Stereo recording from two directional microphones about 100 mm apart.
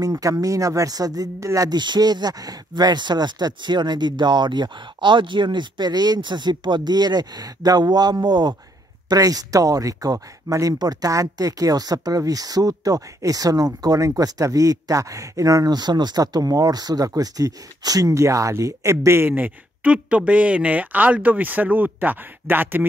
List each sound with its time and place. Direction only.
0.0 s speech: 35° right (ahead or behind)